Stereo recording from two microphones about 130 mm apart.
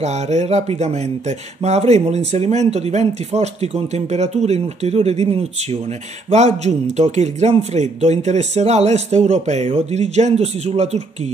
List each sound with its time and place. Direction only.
0.0 s a man's voice: 60° right (ahead or behind)